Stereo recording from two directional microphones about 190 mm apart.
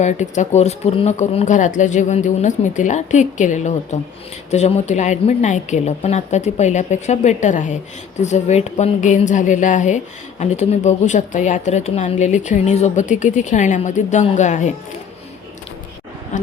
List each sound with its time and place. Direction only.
0.0 s a woman's voice: 40° left (ahead or behind)
16.3 s a woman's voice: 40° left (ahead or behind)